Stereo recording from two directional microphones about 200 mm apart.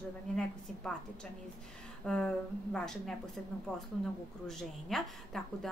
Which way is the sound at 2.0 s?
5° left (ahead or behind).